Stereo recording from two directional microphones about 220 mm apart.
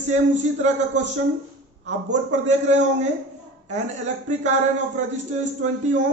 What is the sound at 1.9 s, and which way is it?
A man's voice, 30° right (ahead or behind).